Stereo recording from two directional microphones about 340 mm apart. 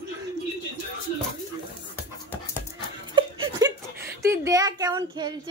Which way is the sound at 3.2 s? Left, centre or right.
Centre.